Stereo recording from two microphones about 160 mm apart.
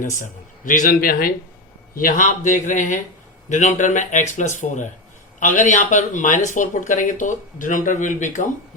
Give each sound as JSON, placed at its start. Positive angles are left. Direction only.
{"t": 0.0, "sound": "speech", "side_deg": 55}